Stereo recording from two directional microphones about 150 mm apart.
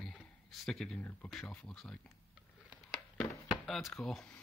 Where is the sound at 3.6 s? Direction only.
Centre (ahead or behind).